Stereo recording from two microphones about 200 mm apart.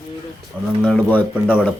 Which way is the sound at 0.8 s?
5° left (ahead or behind).